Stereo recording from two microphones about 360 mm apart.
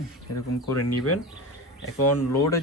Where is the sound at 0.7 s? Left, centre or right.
Left.